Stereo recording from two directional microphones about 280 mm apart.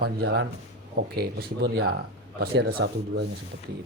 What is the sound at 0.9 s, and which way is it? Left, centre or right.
A man's voice, right.